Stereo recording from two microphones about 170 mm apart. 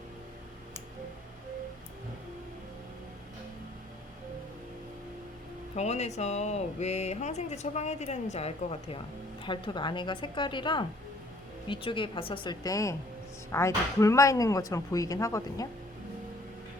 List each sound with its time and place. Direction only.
5.7 s speech: 40° left (ahead or behind); by 15.6 s 20° left (ahead or behind)